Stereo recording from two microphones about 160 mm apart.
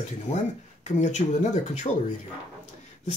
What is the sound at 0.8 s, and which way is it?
Speech, 45° left (ahead or behind).